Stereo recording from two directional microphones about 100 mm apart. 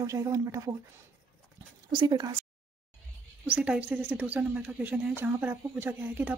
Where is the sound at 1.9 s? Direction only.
45° right (ahead or behind).